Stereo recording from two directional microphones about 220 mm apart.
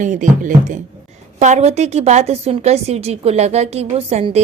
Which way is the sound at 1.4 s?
30° right (ahead or behind).